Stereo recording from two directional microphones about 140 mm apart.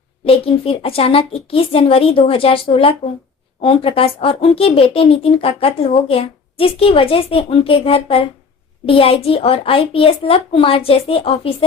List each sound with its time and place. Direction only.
0.3 s a woman's voice: 40° left (ahead or behind)